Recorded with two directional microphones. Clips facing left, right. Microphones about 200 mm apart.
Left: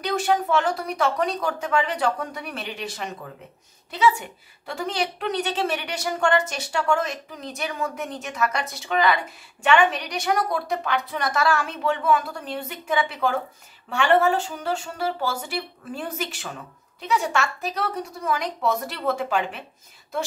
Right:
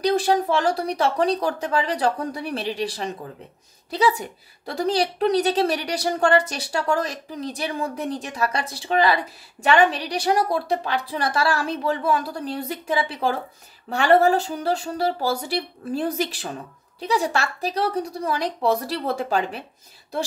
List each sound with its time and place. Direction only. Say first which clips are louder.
0.0 s a woman's voice: right 3 dB; 35° right (ahead or behind)